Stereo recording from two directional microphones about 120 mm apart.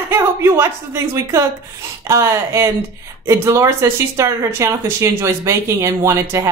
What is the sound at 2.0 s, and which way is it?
Speech, 25° right (ahead or behind).